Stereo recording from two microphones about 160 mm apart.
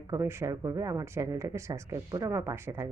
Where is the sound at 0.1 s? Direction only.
15° right (ahead or behind).